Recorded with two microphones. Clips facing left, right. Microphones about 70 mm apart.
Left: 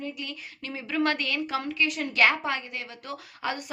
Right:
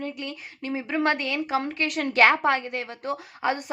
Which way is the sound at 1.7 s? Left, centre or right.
Right.